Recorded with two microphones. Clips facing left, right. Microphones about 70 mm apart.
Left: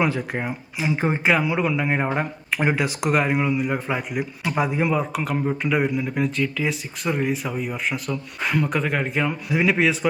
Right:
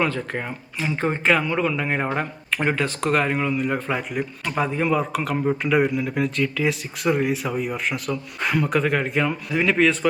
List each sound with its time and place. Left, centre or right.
0.0 s speech: centre